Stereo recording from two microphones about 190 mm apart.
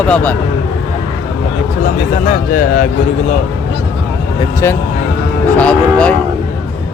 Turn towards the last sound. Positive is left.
turn(degrees=5)  # may be behind; listen again after turning